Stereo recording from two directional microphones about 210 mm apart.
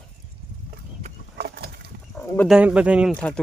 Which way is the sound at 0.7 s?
45° right (ahead or behind).